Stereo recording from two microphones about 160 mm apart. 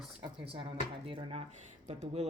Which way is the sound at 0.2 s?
35° right (ahead or behind).